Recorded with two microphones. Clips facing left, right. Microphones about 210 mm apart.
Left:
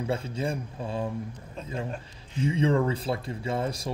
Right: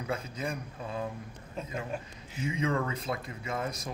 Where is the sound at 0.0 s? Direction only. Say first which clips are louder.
Left 5 dB; 30° left (ahead or behind).